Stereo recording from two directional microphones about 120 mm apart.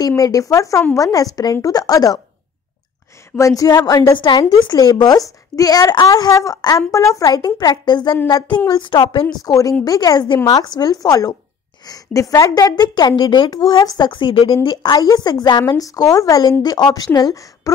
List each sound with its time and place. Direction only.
0.2 s a woman's voice: 30° left (ahead or behind)
3.3 s a woman's voice: 30° left (ahead or behind); by 9.3 s 45° left (ahead or behind)
9.4 s a woman's voice: 30° left (ahead or behind); by 14.7 s 50° left (ahead or behind)
14.7 s a woman's voice: 35° left (ahead or behind)